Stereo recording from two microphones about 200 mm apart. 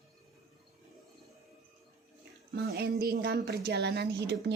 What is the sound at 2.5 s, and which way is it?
A woman's voice, 55° right (ahead or behind).